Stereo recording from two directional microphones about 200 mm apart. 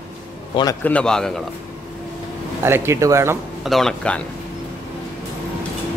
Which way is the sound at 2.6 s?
10° right (ahead or behind).